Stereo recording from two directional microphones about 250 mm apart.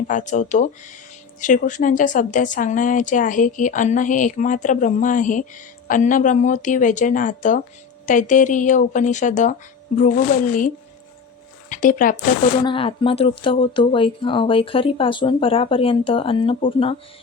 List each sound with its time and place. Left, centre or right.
0.1 s speech: left
11.7 s speech: left
12.6 s speech: left